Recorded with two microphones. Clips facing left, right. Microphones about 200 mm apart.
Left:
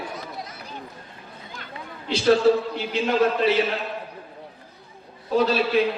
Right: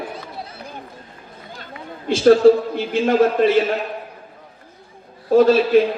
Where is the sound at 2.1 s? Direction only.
50° right (ahead or behind).